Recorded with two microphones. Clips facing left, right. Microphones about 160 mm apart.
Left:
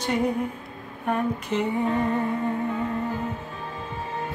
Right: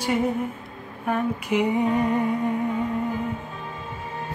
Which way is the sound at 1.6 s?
15° right (ahead or behind).